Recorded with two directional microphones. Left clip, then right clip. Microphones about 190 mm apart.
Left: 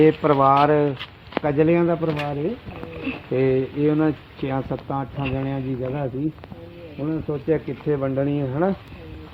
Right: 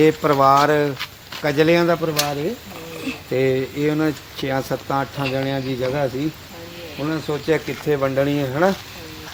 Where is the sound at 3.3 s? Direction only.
15° left (ahead or behind).